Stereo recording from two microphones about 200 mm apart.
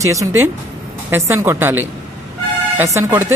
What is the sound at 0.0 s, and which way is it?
Speech, 15° right (ahead or behind).